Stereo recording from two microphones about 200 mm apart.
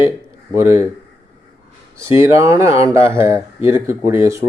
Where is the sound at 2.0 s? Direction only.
15° right (ahead or behind).